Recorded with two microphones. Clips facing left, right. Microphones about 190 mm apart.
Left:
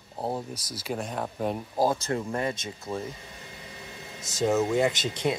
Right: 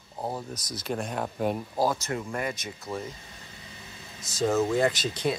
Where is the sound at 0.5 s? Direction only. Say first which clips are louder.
Right 1 dB; 10° left (ahead or behind).